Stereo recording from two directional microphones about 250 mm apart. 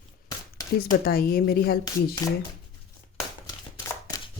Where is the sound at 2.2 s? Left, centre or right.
Centre.